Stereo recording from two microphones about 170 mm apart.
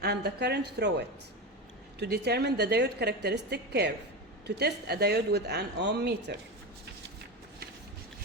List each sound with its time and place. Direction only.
0.0 s a woman's voice: 75° right (ahead or behind)